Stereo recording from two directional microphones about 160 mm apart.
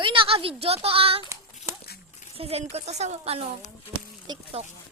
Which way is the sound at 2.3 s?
40° right (ahead or behind).